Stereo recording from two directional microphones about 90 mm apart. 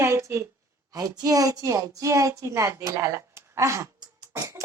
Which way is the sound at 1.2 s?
40° right (ahead or behind).